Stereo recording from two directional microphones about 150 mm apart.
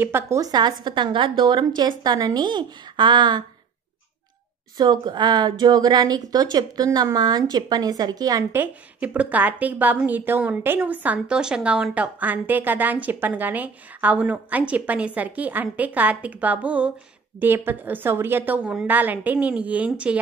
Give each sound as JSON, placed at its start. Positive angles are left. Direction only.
{"t": 0.0, "sound": "a woman's voice", "side_deg": -15}
{"t": 4.7, "sound": "a woman's voice", "side_deg": -30}
{"t": 8.5, "sound": "a woman's voice", "side_deg": -10}